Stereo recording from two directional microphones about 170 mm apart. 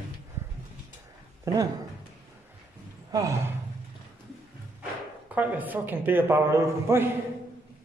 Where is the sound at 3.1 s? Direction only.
20° right (ahead or behind).